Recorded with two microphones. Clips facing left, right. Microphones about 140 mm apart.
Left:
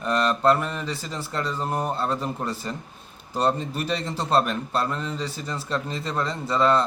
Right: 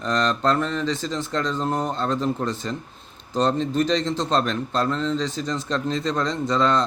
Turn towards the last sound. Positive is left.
turn(degrees=5)  # may be behind; listen again after turning